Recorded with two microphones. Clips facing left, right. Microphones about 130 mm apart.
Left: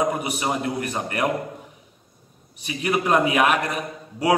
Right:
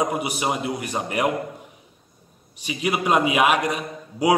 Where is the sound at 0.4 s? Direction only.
10° right (ahead or behind).